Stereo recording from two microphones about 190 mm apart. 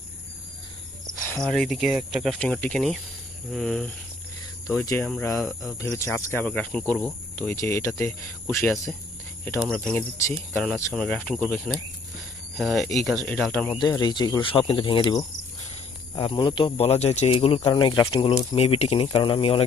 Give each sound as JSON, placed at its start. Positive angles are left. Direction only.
{"t": 1.1, "sound": "speech", "side_deg": 10}
{"t": 5.0, "sound": "speech", "side_deg": 0}
{"t": 5.9, "sound": "speech", "side_deg": 15}
{"t": 13.7, "sound": "speech", "side_deg": 20}